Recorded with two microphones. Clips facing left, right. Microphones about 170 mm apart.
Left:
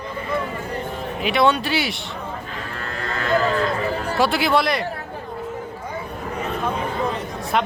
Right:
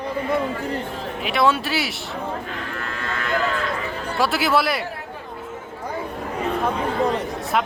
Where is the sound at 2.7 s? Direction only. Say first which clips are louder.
Left 4 dB; 35° left (ahead or behind).